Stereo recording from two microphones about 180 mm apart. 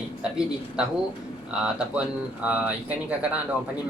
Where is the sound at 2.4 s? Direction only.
10° right (ahead or behind).